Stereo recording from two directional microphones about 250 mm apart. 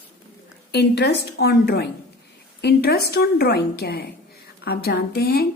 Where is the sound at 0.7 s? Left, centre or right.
Left.